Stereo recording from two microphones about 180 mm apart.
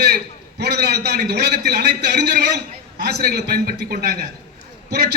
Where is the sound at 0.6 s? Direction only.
65° right (ahead or behind).